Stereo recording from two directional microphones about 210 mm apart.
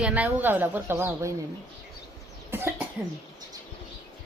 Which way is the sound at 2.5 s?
10° right (ahead or behind).